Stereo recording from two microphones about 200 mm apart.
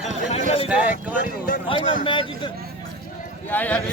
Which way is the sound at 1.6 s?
25° left (ahead or behind).